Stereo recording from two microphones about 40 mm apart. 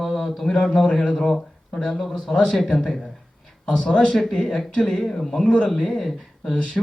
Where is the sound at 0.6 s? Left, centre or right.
Centre.